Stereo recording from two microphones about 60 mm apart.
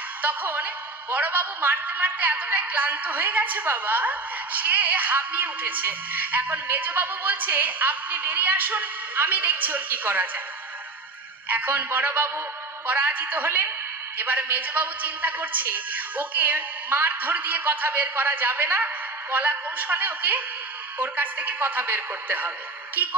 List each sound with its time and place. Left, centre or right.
0.2 s a woman's voice: right
11.4 s a woman's voice: right